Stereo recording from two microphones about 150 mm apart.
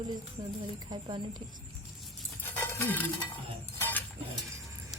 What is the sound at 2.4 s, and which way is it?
Music, 15° left (ahead or behind).